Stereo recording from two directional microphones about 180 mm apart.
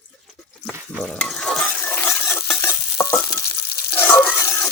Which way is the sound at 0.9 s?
Centre (ahead or behind).